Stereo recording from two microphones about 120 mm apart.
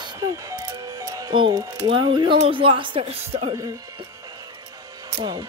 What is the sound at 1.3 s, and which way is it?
Speech, 45° right (ahead or behind).